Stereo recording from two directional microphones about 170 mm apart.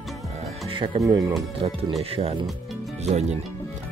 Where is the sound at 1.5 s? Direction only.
35° right (ahead or behind).